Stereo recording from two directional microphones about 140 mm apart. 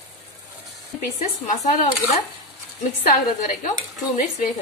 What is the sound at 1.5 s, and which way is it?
Speech, 60° left (ahead or behind).